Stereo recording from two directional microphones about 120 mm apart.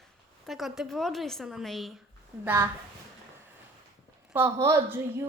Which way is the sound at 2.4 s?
20° right (ahead or behind).